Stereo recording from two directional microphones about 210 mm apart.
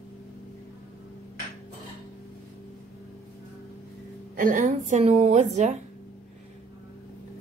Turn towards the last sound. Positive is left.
turn(degrees=-35)  # may be behind; listen again after turning